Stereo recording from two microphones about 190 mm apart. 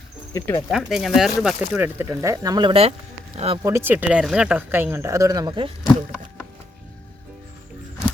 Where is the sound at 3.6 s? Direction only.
15° right (ahead or behind).